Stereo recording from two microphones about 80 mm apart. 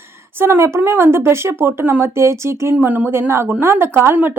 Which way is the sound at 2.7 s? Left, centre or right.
Right.